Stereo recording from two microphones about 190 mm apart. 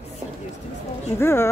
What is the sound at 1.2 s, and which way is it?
Speech, 15° left (ahead or behind).